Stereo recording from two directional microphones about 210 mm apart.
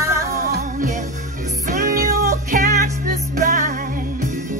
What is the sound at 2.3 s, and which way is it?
Music, 35° right (ahead or behind).